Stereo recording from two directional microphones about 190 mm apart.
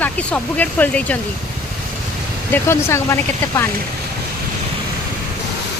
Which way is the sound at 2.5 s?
15° left (ahead or behind).